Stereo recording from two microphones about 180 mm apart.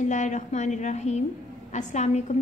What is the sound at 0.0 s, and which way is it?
A woman's voice, 40° left (ahead or behind).